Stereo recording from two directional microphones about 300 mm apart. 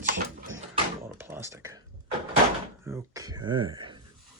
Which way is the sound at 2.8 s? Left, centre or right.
Centre.